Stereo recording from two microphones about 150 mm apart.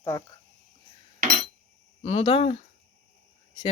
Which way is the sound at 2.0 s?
45° left (ahead or behind).